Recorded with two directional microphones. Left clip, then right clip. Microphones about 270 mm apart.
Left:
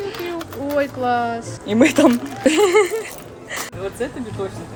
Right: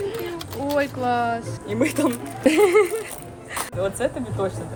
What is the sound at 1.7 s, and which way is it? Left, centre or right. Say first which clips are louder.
Speech: left 8 dB; left.